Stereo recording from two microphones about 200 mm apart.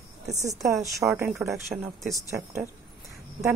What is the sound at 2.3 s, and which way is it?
Speech, 10° right (ahead or behind).